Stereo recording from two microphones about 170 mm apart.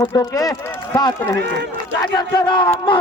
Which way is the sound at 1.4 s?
90° right.